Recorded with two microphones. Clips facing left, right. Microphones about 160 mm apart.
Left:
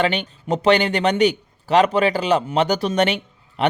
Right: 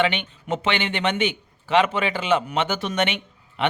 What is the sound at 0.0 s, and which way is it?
A man's voice, 35° left (ahead or behind).